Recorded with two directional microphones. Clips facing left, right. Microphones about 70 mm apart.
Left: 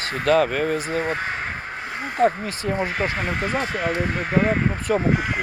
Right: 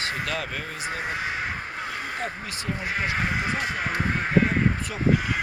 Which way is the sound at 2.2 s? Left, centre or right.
Left.